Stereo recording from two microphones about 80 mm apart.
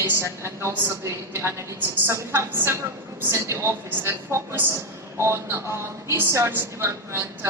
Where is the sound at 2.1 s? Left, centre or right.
Right.